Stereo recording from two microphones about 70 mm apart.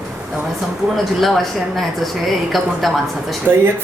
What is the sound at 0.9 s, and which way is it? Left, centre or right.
A woman's voice, centre.